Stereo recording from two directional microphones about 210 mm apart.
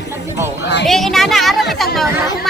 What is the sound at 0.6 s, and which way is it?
Speech, 55° left (ahead or behind).